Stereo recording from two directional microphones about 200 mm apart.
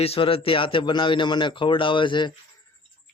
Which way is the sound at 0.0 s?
30° left (ahead or behind).